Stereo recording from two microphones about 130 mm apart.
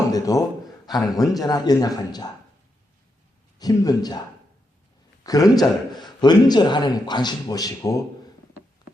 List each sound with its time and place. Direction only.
0.1 s a man's voice: 25° left (ahead or behind)
3.6 s a man's voice: 30° left (ahead or behind)
5.2 s a man's voice: 30° left (ahead or behind)